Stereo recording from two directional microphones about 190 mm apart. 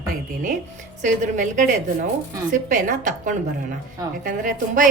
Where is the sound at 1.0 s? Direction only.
40° right (ahead or behind).